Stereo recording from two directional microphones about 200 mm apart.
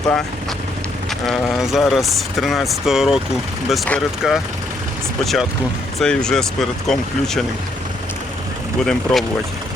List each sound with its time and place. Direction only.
1.3 s speech: centre (ahead or behind)
8.8 s speech: 5° left (ahead or behind)